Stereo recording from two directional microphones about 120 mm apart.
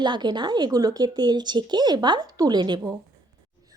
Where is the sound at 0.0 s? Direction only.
35° right (ahead or behind).